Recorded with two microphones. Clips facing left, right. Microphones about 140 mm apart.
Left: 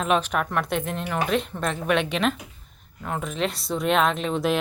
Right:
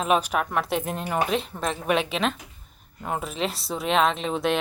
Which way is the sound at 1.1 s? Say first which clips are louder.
Even; 5° right (ahead or behind).